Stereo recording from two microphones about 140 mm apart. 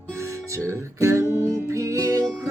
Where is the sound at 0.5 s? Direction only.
20° right (ahead or behind).